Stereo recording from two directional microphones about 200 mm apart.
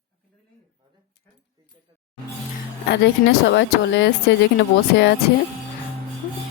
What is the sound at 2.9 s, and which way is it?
Speech, 60° left (ahead or behind).